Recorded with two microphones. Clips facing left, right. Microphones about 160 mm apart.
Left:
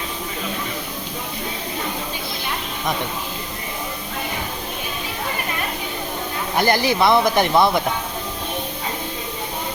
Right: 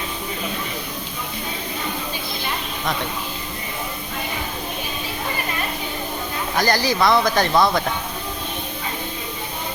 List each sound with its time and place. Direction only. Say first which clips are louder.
6.6 s speech: left 2 dB; 20° left (ahead or behind)